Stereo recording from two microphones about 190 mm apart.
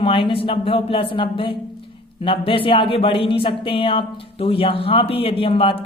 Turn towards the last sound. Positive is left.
turn(degrees=30)  # may be behind; listen again after turning